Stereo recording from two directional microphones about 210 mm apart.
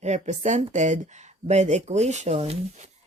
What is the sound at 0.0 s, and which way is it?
Speech, 35° right (ahead or behind).